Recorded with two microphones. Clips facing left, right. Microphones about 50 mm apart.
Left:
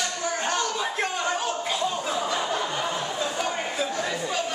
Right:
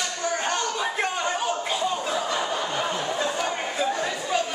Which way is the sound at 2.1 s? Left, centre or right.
Centre.